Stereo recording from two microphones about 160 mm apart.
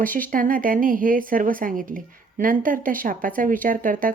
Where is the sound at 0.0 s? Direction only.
60° right (ahead or behind).